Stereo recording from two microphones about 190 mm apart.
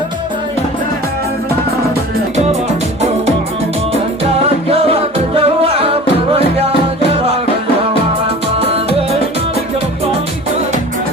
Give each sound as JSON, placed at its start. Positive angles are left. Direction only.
{"t": 4.7, "sound": "music", "side_deg": -30}
{"t": 8.5, "sound": "music", "side_deg": -30}